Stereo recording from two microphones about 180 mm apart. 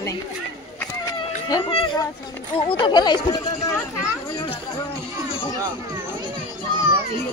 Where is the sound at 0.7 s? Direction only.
20° left (ahead or behind).